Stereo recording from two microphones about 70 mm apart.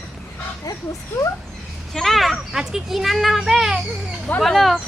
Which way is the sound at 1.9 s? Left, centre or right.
Centre.